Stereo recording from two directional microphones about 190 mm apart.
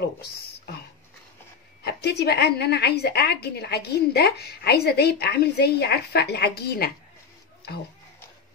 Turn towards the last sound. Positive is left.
turn(degrees=55)  # may be behind; listen again after turning